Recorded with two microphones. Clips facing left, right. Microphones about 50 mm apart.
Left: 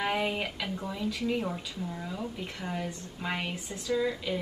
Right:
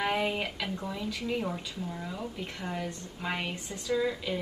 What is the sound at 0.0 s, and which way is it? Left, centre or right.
A woman's voice, centre.